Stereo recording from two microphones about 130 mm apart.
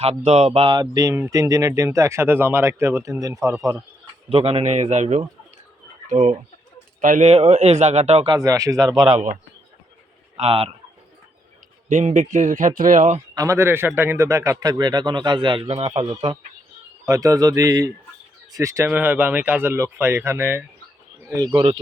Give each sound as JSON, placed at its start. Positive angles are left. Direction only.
{"t": 0.0, "sound": "speech", "side_deg": -55}
{"t": 0.7, "sound": "speech", "side_deg": -30}
{"t": 4.3, "sound": "speech", "side_deg": -50}
{"t": 7.0, "sound": "speech", "side_deg": -90}
{"t": 7.3, "sound": "speech", "side_deg": -55}
{"t": 8.3, "sound": "speech", "side_deg": -25}
{"t": 10.3, "sound": "speech", "side_deg": -50}
{"t": 11.9, "sound": "a man's voice", "side_deg": -70}
{"t": 13.3, "sound": "a man's voice", "side_deg": -25}
{"t": 17.1, "sound": "speech", "side_deg": -25}
{"t": 21.2, "sound": "speech", "side_deg": -30}